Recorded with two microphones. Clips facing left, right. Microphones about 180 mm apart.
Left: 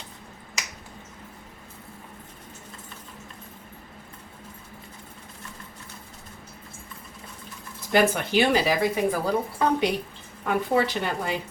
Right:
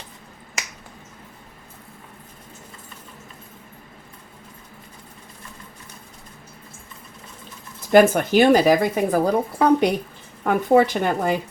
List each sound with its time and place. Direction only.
7.8 s speech: 50° right (ahead or behind)